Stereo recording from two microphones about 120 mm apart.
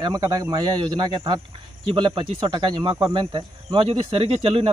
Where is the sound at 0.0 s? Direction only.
35° right (ahead or behind).